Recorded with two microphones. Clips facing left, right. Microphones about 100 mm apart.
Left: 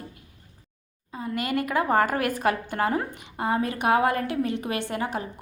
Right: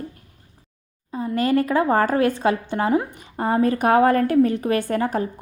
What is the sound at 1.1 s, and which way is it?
A woman's voice, 35° right (ahead or behind).